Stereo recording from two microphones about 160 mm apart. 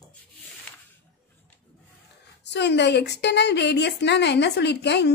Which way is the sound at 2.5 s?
90° left.